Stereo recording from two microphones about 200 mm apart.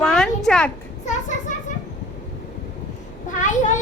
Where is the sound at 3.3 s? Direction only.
40° left (ahead or behind).